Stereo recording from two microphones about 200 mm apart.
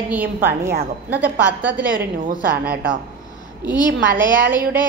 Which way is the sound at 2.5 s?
50° right (ahead or behind).